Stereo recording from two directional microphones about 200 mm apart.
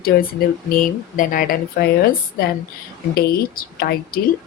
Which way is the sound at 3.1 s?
50° left (ahead or behind).